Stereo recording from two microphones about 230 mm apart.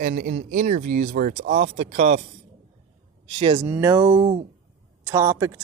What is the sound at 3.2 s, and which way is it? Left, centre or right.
Speech, right.